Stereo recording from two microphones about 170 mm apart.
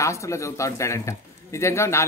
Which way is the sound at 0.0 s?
15° left (ahead or behind).